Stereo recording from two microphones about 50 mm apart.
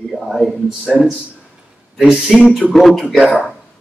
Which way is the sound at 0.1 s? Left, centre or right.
Centre.